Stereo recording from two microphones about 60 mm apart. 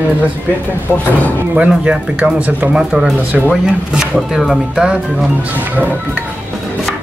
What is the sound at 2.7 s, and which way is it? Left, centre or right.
Speech, centre.